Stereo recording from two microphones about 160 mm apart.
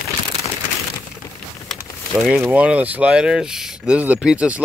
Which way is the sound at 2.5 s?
10° right (ahead or behind).